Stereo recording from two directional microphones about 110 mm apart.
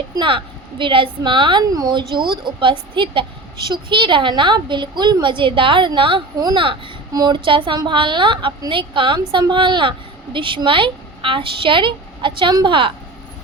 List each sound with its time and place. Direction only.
0.2 s a woman's voice: 50° right (ahead or behind)
7.1 s a woman's voice: 40° right (ahead or behind)